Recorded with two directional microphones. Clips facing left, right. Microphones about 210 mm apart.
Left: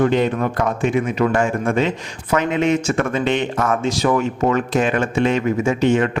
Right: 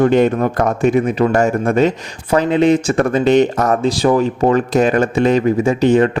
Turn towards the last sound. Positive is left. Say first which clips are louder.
# right 4 dB
turn(degrees=-35)  # may be behind; listen again after turning